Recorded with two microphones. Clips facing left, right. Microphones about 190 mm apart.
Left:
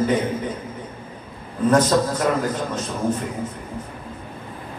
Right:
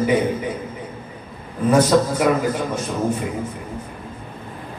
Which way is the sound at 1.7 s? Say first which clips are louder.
Right 2 dB; 10° right (ahead or behind).